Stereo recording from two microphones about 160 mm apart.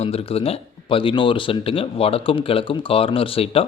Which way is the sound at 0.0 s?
40° left (ahead or behind).